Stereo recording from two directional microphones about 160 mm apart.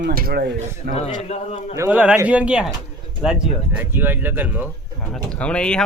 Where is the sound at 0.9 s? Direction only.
40° left (ahead or behind).